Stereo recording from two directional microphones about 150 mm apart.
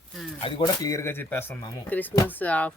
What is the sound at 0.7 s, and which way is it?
Speech, 20° left (ahead or behind).